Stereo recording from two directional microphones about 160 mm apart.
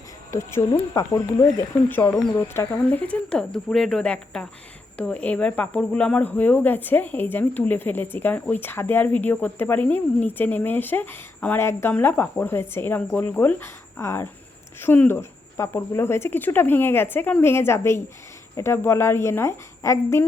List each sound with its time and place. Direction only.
0.3 s speech: 15° left (ahead or behind)